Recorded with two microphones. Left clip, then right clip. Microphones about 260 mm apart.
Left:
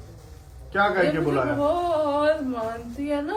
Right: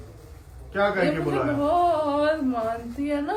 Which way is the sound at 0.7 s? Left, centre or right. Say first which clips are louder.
Left 2 dB; left.